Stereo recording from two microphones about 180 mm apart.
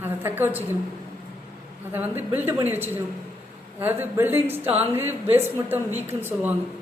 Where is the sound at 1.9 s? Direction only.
10° right (ahead or behind).